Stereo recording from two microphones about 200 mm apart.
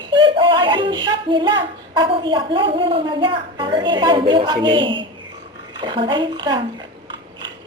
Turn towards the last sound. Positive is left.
turn(degrees=-25)  # may be behind; listen again after turning